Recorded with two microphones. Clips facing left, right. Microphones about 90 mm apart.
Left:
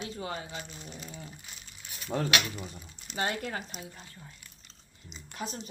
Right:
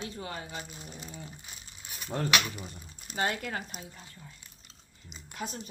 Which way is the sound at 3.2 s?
35° left (ahead or behind).